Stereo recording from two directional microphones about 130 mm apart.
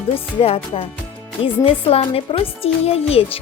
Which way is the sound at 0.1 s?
50° left (ahead or behind).